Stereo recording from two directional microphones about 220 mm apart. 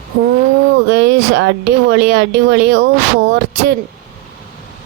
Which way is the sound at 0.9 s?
50° right (ahead or behind).